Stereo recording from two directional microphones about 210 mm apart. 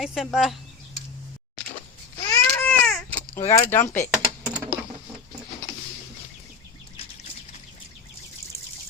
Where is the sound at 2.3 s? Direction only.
5° left (ahead or behind).